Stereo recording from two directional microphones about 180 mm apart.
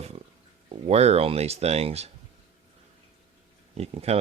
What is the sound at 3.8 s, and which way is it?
Speech, 35° right (ahead or behind).